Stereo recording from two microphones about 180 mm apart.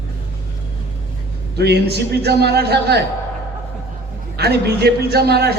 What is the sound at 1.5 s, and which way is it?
A man's voice, 65° right (ahead or behind).